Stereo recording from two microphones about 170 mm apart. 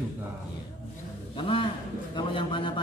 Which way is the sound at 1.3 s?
30° left (ahead or behind).